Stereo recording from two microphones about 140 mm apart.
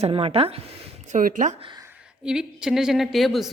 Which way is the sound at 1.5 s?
35° right (ahead or behind).